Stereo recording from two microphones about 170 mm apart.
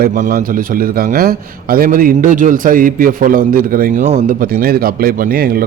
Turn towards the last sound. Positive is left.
turn(degrees=-60)  # may be behind; listen again after turning